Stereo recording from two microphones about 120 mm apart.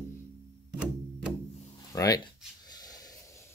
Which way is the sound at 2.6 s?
35° left (ahead or behind).